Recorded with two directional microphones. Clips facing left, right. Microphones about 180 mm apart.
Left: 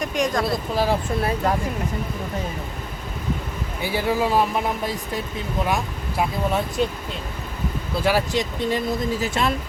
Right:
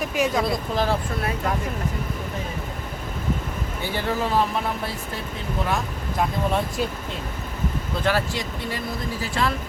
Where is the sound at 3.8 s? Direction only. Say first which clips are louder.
Left 4 dB; 10° left (ahead or behind).